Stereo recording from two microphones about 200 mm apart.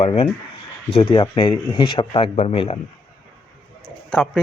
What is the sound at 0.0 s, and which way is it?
Speech, 30° left (ahead or behind).